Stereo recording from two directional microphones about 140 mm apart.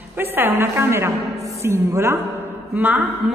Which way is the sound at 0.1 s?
15° right (ahead or behind).